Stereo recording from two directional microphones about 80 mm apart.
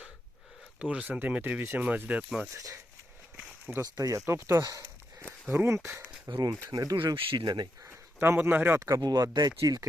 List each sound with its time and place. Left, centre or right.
0.8 s speech: centre
2.5 s speech: right
3.8 s speech: right
5.5 s speech: right
6.3 s speech: right
6.9 s speech: right
7.9 s speech: right
9.0 s speech: right